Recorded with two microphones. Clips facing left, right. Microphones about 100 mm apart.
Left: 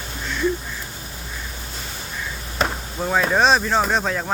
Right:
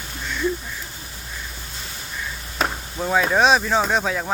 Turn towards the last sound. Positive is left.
turn(degrees=0)  # may be behind; listen again after turning